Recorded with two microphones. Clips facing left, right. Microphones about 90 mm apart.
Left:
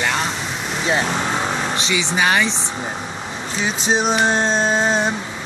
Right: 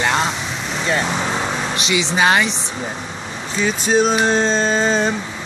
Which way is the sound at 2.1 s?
20° right (ahead or behind).